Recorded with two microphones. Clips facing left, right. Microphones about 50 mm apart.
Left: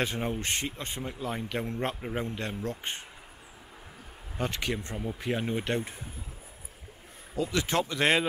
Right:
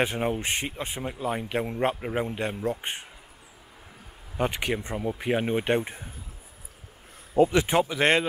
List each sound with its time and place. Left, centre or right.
0.0 s speech: centre
4.4 s speech: centre
7.5 s speech: centre